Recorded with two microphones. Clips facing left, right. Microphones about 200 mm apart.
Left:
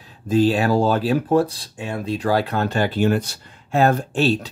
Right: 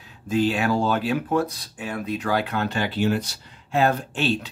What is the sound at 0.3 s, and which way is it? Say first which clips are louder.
Speech: left 4 dB; 35° left (ahead or behind).